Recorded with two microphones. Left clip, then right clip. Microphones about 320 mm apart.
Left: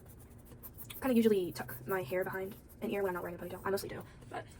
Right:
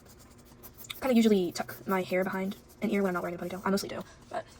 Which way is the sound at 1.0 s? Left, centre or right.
Right.